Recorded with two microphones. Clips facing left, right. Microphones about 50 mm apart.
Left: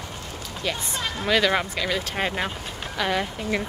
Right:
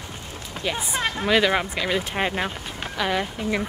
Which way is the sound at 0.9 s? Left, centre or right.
Right.